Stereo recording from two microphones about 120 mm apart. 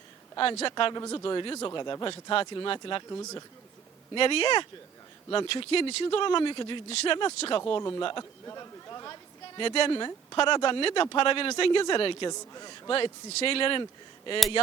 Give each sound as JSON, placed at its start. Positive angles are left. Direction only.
{"t": 0.3, "sound": "speech", "side_deg": 50}
{"t": 0.9, "sound": "speech", "side_deg": 35}
{"t": 2.3, "sound": "speech", "side_deg": 45}
{"t": 3.1, "sound": "speech", "side_deg": 25}
{"t": 4.1, "sound": "speech", "side_deg": 50}
{"t": 7.8, "sound": "speech", "side_deg": 30}
{"t": 9.6, "sound": "speech", "side_deg": 50}
{"t": 12.3, "sound": "speech", "side_deg": 30}
{"t": 12.9, "sound": "speech", "side_deg": 50}